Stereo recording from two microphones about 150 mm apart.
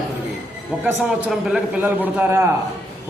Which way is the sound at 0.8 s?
10° right (ahead or behind).